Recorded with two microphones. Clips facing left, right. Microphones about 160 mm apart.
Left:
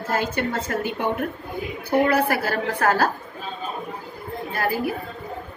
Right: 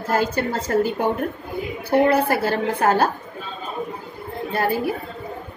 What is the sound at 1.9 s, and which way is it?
A woman's voice, 25° right (ahead or behind).